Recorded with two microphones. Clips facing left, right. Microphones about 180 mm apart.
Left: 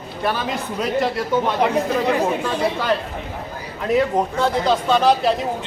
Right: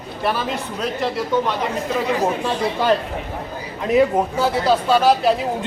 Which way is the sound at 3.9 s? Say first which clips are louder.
Right 3 dB; 5° right (ahead or behind).